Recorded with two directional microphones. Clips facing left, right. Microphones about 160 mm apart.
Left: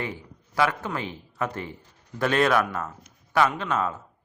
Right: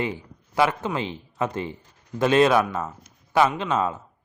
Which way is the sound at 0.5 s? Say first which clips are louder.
Right 3 dB; 25° right (ahead or behind).